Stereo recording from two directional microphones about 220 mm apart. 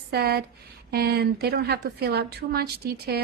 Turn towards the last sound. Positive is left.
turn(degrees=-45)  # may be behind; listen again after turning